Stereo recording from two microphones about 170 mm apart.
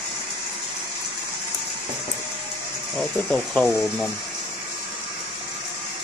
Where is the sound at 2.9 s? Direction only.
5° left (ahead or behind).